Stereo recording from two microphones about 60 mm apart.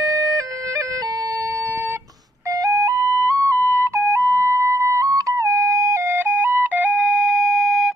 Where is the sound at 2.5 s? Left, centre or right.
Right.